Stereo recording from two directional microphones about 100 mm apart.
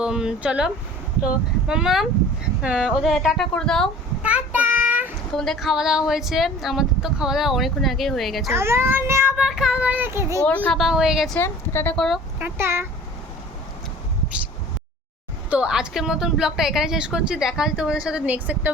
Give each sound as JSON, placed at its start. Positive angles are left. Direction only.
{"t": 0.0, "sound": "speech", "side_deg": -10}
{"t": 4.2, "sound": "child singing", "side_deg": -15}
{"t": 5.3, "sound": "speech", "side_deg": 5}
{"t": 8.5, "sound": "speech", "side_deg": -25}
{"t": 9.4, "sound": "a woman's voice", "side_deg": -5}
{"t": 10.4, "sound": "speech", "side_deg": 15}
{"t": 10.8, "sound": "speech", "side_deg": -5}
{"t": 11.3, "sound": "a woman's voice", "side_deg": 25}
{"t": 11.9, "sound": "speech", "side_deg": 0}
{"t": 12.4, "sound": "speech", "side_deg": -20}
{"t": 15.4, "sound": "a woman's voice", "side_deg": -10}